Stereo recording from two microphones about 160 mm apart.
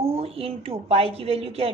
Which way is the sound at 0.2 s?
40° right (ahead or behind).